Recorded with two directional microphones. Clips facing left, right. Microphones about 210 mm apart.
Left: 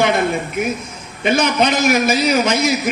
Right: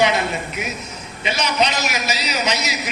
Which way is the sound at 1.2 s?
50° left (ahead or behind).